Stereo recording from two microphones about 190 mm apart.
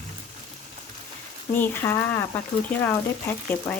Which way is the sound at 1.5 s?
10° left (ahead or behind).